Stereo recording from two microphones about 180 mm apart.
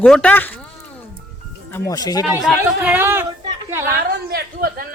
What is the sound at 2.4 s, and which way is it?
Speech, 10° right (ahead or behind).